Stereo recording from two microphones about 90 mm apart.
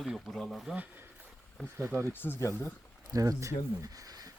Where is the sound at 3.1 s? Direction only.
40° right (ahead or behind).